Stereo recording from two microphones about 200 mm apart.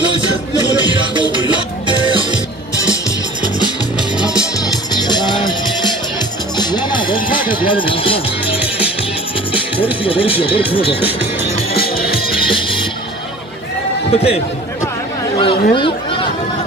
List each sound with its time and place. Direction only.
1.1 s music: 25° right (ahead or behind)
4.9 s music: 20° left (ahead or behind)
9.8 s speech: 25° left (ahead or behind)
12.4 s music: 25° left (ahead or behind)
14.1 s speech: 30° left (ahead or behind)
15.3 s a sound: 25° left (ahead or behind)